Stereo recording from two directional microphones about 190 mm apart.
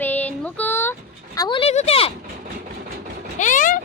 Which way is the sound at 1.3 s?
25° left (ahead or behind).